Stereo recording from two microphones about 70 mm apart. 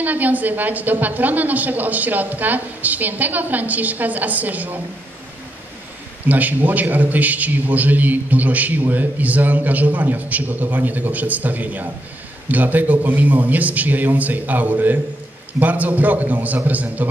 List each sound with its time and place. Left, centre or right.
0.0 s a man's voice: right
6.2 s a man's voice: right